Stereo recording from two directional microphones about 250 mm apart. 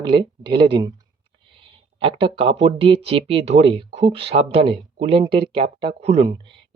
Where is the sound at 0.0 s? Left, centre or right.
Centre.